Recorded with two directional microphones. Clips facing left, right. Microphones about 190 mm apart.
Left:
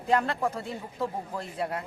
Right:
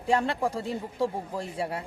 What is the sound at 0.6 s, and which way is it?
Speech, 35° right (ahead or behind).